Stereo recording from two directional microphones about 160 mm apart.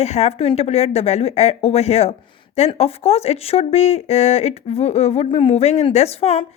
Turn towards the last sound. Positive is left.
turn(degrees=40)  # may be behind; listen again after turning